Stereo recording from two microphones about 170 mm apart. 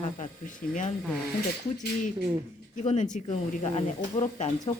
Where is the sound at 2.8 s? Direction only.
45° left (ahead or behind).